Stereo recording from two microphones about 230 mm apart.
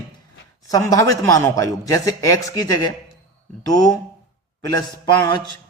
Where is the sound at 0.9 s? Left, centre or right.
Centre.